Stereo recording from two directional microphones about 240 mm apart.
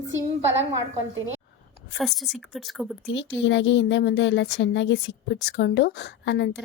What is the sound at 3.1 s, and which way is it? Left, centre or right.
Speech, left.